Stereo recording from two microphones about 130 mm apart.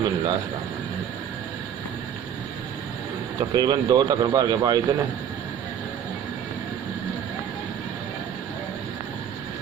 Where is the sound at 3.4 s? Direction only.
35° right (ahead or behind).